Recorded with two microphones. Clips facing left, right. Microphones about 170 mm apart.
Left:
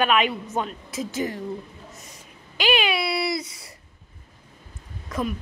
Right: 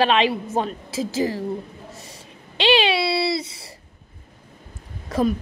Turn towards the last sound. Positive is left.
turn(degrees=-35)  # may be behind; listen again after turning